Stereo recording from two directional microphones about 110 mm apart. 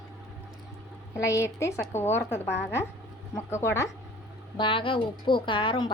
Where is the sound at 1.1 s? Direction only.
30° left (ahead or behind).